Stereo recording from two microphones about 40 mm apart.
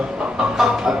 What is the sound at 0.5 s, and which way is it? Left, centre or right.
Speech, centre.